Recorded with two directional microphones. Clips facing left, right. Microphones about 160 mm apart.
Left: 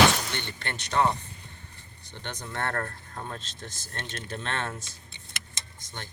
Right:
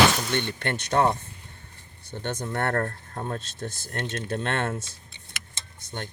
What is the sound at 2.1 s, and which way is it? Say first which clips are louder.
Speech: right 7 dB; 45° right (ahead or behind).